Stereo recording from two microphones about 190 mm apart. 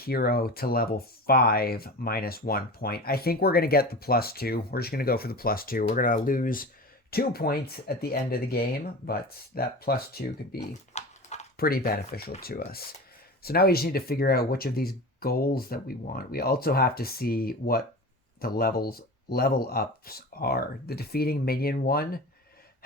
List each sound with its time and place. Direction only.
0.0 s speech: 55° left (ahead or behind)
10.6 s dog: 35° left (ahead or behind)
11.5 s speech: 50° left (ahead or behind)